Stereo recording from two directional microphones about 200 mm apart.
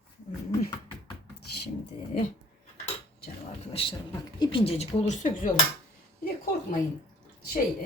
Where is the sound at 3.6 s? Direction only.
30° left (ahead or behind).